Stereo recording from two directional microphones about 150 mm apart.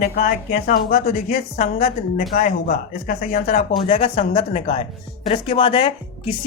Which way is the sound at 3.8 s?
45° left (ahead or behind).